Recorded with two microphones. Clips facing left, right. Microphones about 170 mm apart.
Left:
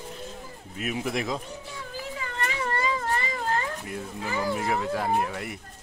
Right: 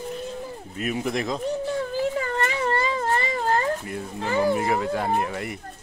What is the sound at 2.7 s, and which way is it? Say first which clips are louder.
Baby cry: right 2 dB; 30° right (ahead or behind).